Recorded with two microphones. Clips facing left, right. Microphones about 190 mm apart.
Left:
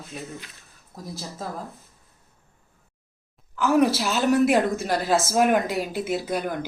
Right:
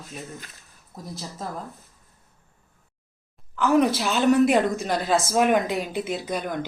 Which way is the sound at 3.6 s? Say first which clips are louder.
Even; 5° left (ahead or behind).